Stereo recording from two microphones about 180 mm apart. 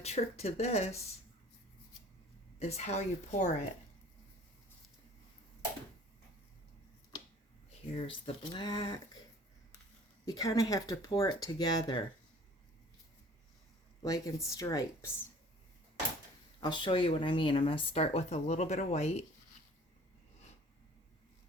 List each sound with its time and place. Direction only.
0.0 s speech: 35° left (ahead or behind)
2.6 s speech: 35° left (ahead or behind)
7.9 s speech: 30° left (ahead or behind)
10.2 s speech: 20° left (ahead or behind)
14.0 s speech: 20° left (ahead or behind)
16.6 s speech: 25° left (ahead or behind)